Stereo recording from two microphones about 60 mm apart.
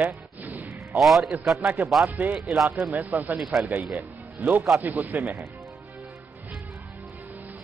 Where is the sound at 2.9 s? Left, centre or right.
Right.